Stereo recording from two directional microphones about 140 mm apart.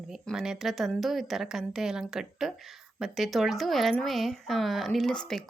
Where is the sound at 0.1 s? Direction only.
5° right (ahead or behind).